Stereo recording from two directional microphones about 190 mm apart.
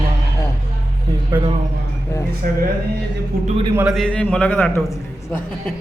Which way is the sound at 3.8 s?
Centre (ahead or behind).